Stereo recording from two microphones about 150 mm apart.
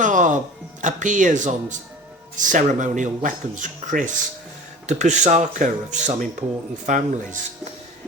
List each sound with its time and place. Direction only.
0.0 s music: 55° right (ahead or behind)
0.8 s speech: 60° right (ahead or behind)